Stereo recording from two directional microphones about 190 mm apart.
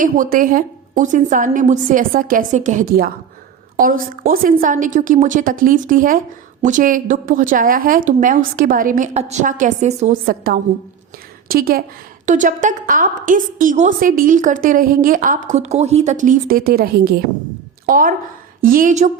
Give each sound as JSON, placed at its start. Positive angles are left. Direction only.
{"t": 0.0, "sound": "a woman's voice", "side_deg": -45}
{"t": 10.2, "sound": "a woman's voice", "side_deg": -50}